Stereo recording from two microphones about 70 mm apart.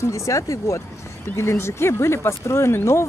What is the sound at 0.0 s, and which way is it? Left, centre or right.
Speech, left.